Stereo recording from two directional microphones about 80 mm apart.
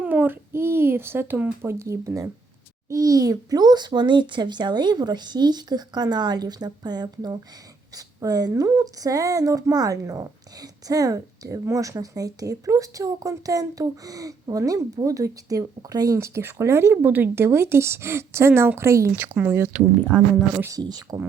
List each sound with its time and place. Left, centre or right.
0.0 s a child's voice: right
16.1 s speech: right
19.2 s speech: right
20.1 s speech: left
20.8 s a child's voice: right